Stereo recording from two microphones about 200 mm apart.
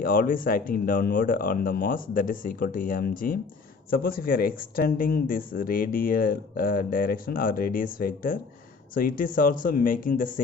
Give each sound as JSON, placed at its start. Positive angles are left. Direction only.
{"t": 0.0, "sound": "speech", "side_deg": 45}